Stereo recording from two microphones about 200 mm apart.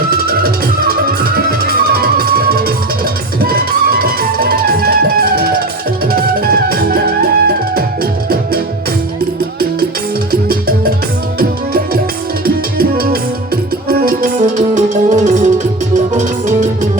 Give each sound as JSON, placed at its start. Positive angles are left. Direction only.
{"t": 0.1, "sound": "music", "side_deg": -50}
{"t": 10.5, "sound": "music", "side_deg": -50}
{"t": 12.5, "sound": "music", "side_deg": -50}